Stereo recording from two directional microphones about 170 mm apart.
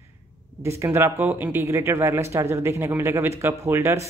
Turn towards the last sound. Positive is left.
turn(degrees=-15)  # may be behind; listen again after turning